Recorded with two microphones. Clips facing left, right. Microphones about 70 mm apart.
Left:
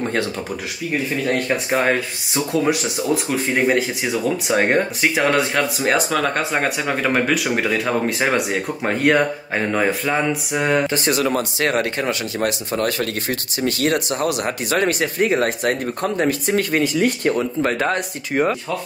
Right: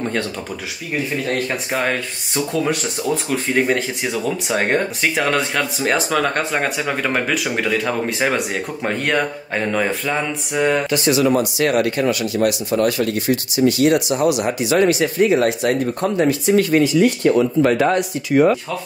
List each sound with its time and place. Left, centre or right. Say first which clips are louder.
1.5 s speech: left 3 dB; centre
11.3 s speech: right 3 dB; left